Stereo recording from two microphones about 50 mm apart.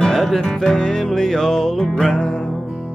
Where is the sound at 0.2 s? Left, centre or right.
Centre.